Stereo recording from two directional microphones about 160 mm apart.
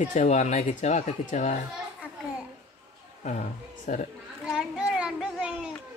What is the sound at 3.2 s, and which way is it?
Speech, 50° left (ahead or behind).